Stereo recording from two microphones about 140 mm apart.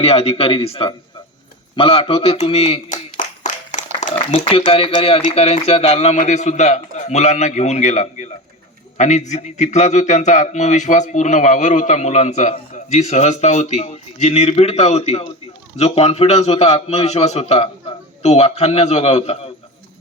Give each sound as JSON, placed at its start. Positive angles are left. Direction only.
{"t": 0.0, "sound": "a man's voice", "side_deg": 45}
{"t": 3.2, "sound": "clapping", "side_deg": 65}
{"t": 4.3, "sound": "a man's voice", "side_deg": 45}